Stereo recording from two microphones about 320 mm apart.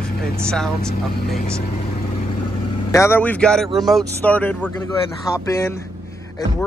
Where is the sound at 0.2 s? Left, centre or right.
Centre.